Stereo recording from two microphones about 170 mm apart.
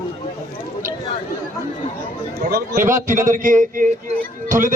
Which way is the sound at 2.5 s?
55° right (ahead or behind).